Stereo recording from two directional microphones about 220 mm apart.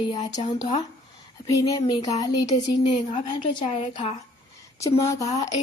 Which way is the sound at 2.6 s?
30° left (ahead or behind).